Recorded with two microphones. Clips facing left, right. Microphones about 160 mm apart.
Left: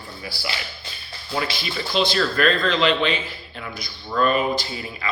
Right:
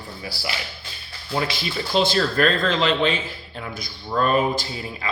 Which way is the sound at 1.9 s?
40° right (ahead or behind).